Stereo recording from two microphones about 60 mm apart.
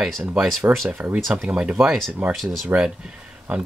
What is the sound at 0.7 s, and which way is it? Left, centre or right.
Speech, right.